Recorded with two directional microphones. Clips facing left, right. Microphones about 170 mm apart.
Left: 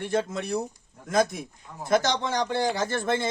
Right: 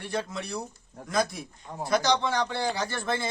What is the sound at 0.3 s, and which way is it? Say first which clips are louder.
Speech: left 4 dB; 50° left (ahead or behind).